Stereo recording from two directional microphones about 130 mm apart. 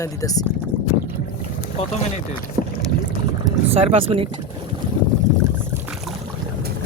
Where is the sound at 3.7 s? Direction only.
50° right (ahead or behind).